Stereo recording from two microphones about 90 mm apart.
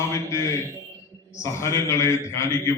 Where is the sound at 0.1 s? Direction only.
35° left (ahead or behind).